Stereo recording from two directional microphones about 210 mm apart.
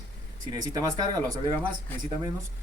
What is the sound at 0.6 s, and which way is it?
Speech, 15° right (ahead or behind).